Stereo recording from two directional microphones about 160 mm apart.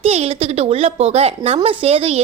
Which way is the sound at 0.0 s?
40° right (ahead or behind).